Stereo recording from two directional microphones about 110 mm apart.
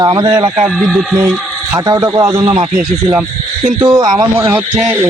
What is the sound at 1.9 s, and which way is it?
Speech, 30° right (ahead or behind).